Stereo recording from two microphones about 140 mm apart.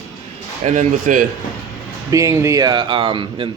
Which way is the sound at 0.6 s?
65° right (ahead or behind).